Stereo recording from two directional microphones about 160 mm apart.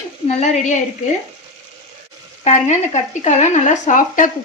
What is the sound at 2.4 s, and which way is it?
Speech, 45° left (ahead or behind).